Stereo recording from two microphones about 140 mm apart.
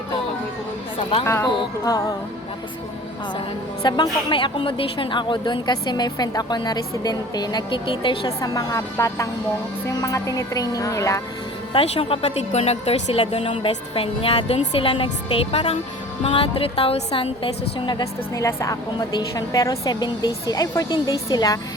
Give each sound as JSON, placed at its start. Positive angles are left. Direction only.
{"t": 1.2, "sound": "a woman's voice", "side_deg": 20}
{"t": 3.8, "sound": "a woman's voice", "side_deg": 30}
{"t": 8.4, "sound": "a woman's voice", "side_deg": 25}
{"t": 11.7, "sound": "a woman's voice", "side_deg": 40}